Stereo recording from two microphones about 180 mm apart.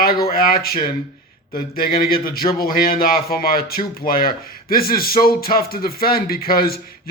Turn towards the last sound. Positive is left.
turn(degrees=55)  # may be behind; listen again after turning